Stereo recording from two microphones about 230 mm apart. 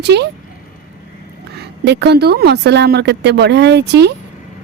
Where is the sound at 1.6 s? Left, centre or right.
Right.